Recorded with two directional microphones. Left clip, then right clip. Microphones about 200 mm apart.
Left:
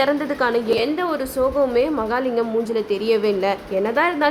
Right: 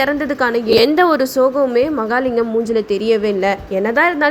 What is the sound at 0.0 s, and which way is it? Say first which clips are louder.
Speech: right 3 dB; 15° right (ahead or behind).